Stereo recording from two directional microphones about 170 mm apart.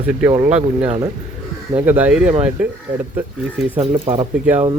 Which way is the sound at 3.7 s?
35° right (ahead or behind).